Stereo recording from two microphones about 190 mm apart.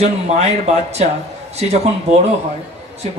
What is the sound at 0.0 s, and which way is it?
Speech, 35° right (ahead or behind).